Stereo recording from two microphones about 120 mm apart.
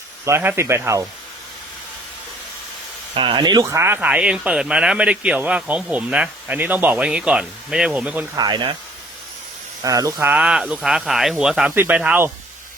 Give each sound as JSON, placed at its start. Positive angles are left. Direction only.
{"t": 0.3, "sound": "speech", "side_deg": -20}
{"t": 3.2, "sound": "speech", "side_deg": -40}
{"t": 8.4, "sound": "speech", "side_deg": -40}
{"t": 9.8, "sound": "speech", "side_deg": -30}
{"t": 10.2, "sound": "speech", "side_deg": -10}